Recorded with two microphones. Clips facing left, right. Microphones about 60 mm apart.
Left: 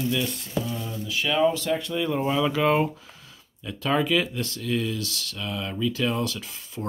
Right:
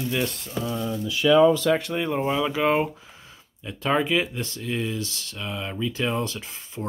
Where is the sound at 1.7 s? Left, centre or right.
Right.